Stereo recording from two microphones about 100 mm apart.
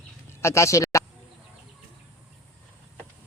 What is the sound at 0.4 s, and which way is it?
Speech, 30° left (ahead or behind).